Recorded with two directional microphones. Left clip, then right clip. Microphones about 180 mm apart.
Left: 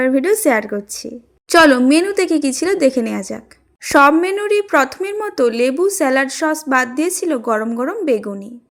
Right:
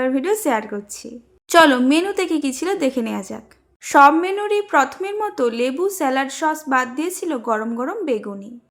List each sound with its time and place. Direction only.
0.0 s a woman's voice: 20° left (ahead or behind)